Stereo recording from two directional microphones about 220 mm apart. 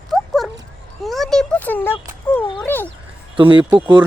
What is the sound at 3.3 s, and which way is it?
Speech, 20° right (ahead or behind).